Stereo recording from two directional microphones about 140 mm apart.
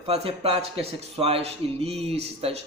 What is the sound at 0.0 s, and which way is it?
Speech, 45° right (ahead or behind).